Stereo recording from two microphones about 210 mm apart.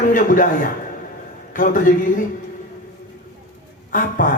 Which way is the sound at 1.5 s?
40° left (ahead or behind).